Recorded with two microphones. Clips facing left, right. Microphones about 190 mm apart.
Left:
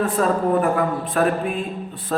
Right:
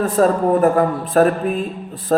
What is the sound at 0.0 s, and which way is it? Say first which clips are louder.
A man's voice: right 4 dB; 40° right (ahead or behind).